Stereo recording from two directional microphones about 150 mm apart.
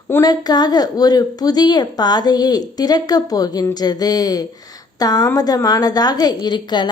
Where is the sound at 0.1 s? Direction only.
25° left (ahead or behind).